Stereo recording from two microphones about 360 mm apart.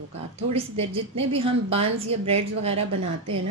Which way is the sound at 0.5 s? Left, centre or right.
Centre.